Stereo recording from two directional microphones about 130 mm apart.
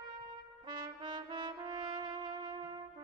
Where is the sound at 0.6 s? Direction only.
35° right (ahead or behind).